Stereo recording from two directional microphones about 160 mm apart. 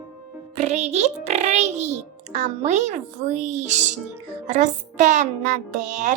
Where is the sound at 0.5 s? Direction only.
40° right (ahead or behind).